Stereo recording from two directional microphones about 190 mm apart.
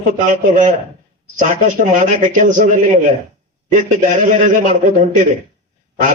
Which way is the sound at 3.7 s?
40° right (ahead or behind).